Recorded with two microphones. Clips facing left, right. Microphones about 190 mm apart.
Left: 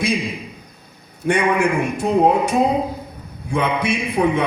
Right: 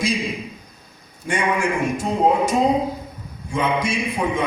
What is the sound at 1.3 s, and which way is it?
Speech, 60° left (ahead or behind).